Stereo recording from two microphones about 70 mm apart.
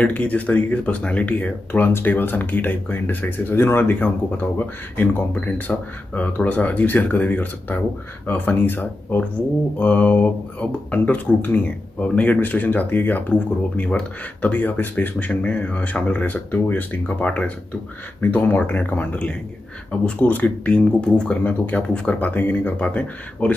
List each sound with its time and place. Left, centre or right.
0.0 s speech: left